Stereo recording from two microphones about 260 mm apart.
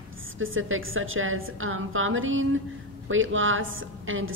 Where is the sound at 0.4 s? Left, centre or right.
Right.